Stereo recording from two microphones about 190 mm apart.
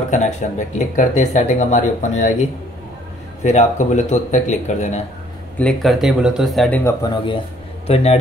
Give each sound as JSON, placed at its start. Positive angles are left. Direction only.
{"t": 0.1, "sound": "speech", "side_deg": 40}
{"t": 3.4, "sound": "speech", "side_deg": 40}
{"t": 5.6, "sound": "a man's voice", "side_deg": 5}
{"t": 6.8, "sound": "speech", "side_deg": 15}